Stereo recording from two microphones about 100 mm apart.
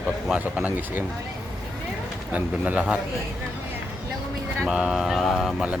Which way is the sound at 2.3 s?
15° right (ahead or behind).